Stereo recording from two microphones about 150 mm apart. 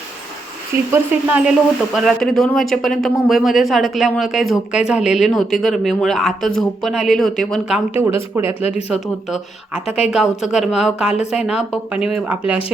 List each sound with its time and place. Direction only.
0.7 s speech: 15° right (ahead or behind)
1.3 s speech: 5° right (ahead or behind)
8.0 s speech: 15° right (ahead or behind)
8.9 s speech: 5° right (ahead or behind)